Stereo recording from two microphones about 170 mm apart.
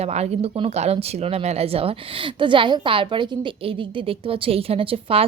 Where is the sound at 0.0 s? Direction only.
40° right (ahead or behind).